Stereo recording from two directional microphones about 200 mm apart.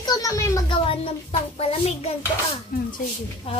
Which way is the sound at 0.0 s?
20° left (ahead or behind).